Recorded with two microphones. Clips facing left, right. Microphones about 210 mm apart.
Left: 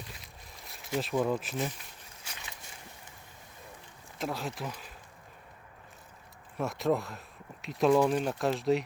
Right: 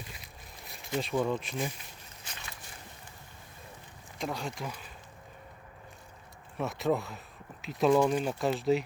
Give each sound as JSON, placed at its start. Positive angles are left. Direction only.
{"t": 0.1, "sound": "a sound", "side_deg": 0}
{"t": 2.2, "sound": "boat", "side_deg": 10}
{"t": 4.2, "sound": "speech", "side_deg": 5}
{"t": 6.6, "sound": "speech", "side_deg": 0}